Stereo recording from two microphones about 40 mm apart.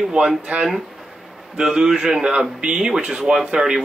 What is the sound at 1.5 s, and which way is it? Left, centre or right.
Speech, centre.